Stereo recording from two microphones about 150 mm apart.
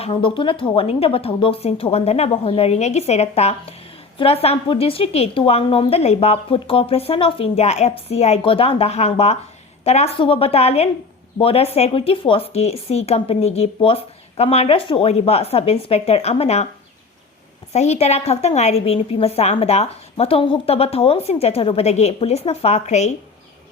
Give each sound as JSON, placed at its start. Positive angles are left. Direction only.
{"t": 0.0, "sound": "a woman's voice", "side_deg": 35}
{"t": 17.7, "sound": "a woman's voice", "side_deg": 45}